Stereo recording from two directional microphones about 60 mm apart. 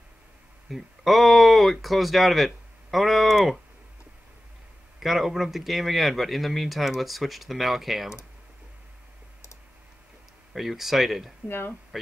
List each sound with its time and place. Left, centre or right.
0.7 s speech: centre
5.0 s speech: centre
10.5 s speech: centre
11.4 s speech: left
11.9 s speech: centre